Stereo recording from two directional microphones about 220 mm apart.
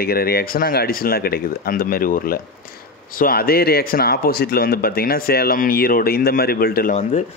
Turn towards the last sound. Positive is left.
turn(degrees=35)  # may be behind; listen again after turning